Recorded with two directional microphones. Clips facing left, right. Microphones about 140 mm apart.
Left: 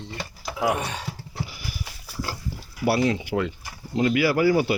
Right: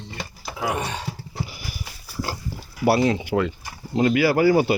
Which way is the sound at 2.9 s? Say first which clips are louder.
Right 3 dB; 30° right (ahead or behind).